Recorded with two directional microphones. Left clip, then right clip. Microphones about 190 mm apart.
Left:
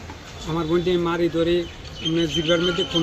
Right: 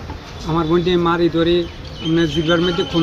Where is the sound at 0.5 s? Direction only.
10° right (ahead or behind).